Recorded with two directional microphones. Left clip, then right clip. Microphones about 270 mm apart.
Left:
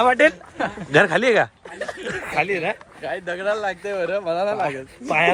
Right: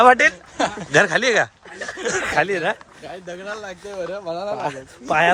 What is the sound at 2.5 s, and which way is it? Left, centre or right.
Speech, centre.